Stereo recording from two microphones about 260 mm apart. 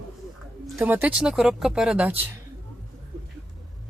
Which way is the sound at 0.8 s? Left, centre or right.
Centre.